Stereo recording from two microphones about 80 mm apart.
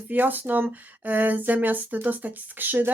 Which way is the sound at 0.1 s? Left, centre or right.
Right.